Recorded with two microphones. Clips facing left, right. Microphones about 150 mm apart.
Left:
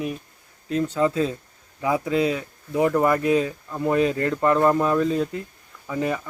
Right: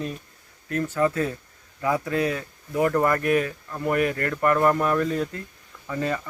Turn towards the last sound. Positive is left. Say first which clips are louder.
# left 2 dB
turn(degrees=15)  # may be behind; listen again after turning